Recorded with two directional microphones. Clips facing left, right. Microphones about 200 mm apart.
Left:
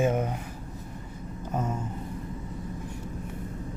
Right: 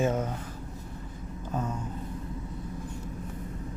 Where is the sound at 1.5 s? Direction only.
20° left (ahead or behind).